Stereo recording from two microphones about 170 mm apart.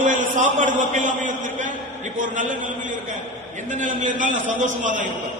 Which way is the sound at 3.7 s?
50° right (ahead or behind).